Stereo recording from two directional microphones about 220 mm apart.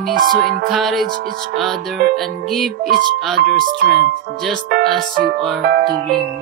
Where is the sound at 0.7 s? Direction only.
Centre (ahead or behind).